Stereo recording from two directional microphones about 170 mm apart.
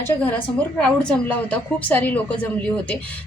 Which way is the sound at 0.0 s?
10° left (ahead or behind).